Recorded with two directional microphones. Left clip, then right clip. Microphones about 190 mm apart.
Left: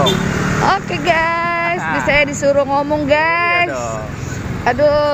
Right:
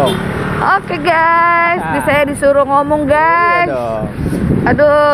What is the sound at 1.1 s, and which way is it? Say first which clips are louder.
Speech: right 6 dB; 10° right (ahead or behind).